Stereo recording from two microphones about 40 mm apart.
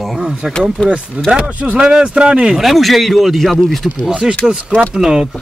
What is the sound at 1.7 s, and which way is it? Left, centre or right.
Speech, right.